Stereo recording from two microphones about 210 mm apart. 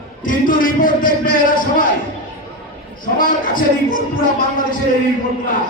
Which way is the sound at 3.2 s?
40° left (ahead or behind).